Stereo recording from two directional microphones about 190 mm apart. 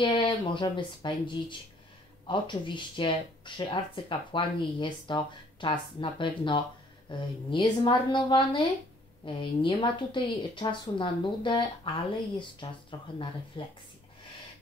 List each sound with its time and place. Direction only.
0.0 s speech: 25° left (ahead or behind)
12.9 s speech: 25° left (ahead or behind)